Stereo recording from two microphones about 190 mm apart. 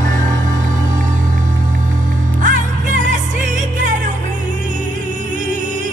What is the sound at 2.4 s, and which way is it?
Music, 40° right (ahead or behind).